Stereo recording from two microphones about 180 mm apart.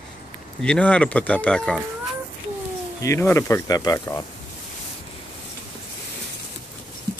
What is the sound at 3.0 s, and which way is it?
Speech, 15° left (ahead or behind).